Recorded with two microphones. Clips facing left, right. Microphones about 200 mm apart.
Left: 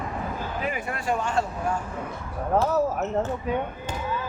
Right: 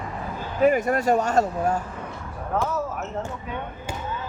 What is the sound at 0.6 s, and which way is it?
Speech, 45° right (ahead or behind).